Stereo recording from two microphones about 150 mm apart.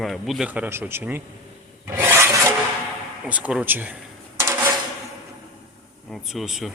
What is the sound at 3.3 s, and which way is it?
Speech, 10° right (ahead or behind).